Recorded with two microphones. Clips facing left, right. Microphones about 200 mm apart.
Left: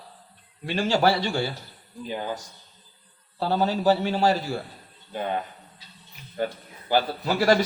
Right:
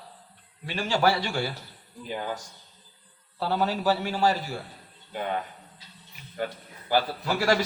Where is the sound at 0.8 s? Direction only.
35° left (ahead or behind).